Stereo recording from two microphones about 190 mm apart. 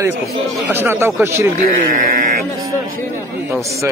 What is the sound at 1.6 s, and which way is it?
Speech, 45° right (ahead or behind).